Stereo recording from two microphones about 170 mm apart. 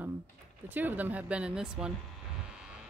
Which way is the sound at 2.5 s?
5° right (ahead or behind).